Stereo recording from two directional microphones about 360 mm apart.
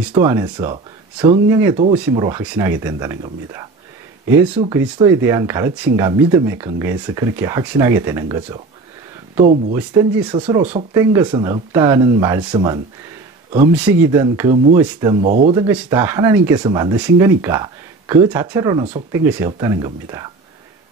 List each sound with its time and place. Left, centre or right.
0.1 s speech: centre
9.8 s speech: centre
14.1 s speech: centre
14.8 s speech: centre
15.6 s speech: centre